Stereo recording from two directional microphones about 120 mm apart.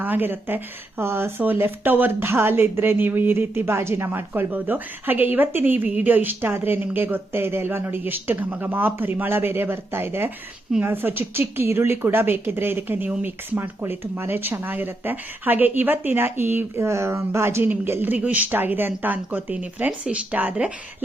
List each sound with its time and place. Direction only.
0.0 s speech: 15° right (ahead or behind)